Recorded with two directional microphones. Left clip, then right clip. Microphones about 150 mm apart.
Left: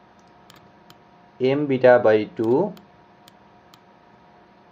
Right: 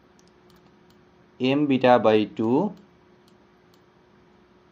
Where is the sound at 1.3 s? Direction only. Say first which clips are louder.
Left 2 dB; 35° right (ahead or behind).